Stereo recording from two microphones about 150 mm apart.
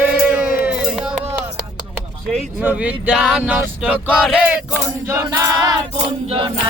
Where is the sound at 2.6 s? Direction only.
10° right (ahead or behind); by 5.8 s 25° right (ahead or behind).